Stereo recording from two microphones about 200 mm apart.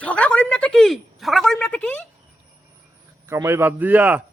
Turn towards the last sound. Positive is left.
turn(degrees=-10)  # may be behind; listen again after turning